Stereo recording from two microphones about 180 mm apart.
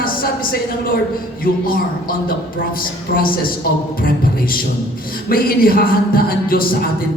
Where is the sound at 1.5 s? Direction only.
55° left (ahead or behind).